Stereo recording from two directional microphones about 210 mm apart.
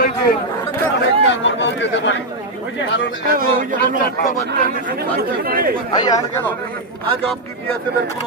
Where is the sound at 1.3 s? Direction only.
60° left (ahead or behind).